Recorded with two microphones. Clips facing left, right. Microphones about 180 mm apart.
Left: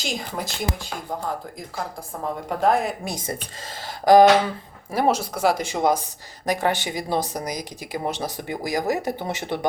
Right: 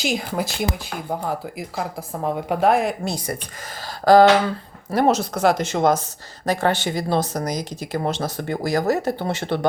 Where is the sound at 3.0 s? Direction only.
20° left (ahead or behind).